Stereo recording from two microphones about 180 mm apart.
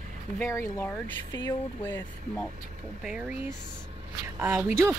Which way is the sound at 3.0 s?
5° right (ahead or behind).